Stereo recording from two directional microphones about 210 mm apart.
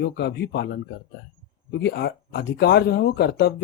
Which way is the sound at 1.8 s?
50° left (ahead or behind).